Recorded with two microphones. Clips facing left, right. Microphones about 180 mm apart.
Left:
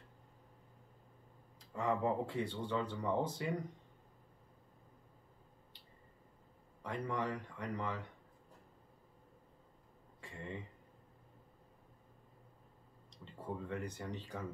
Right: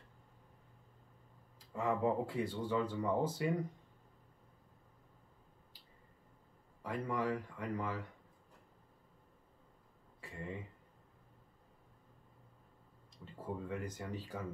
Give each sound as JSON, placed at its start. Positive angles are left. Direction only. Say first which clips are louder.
{"t": 1.7, "sound": "speech", "louder": "right 1 dB", "side_deg": 0}
{"t": 6.8, "sound": "speech", "louder": "right 1 dB", "side_deg": -5}
{"t": 10.2, "sound": "a sound", "louder": "right 2 dB", "side_deg": -5}
{"t": 13.2, "sound": "speech", "louder": "right 1 dB", "side_deg": -5}